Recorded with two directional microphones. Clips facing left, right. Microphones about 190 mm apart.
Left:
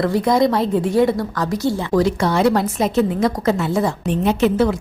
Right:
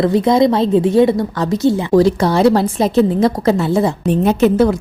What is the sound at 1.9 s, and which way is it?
A woman's voice, 35° right (ahead or behind).